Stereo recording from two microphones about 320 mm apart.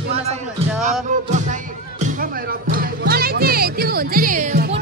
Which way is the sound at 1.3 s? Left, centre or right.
Right.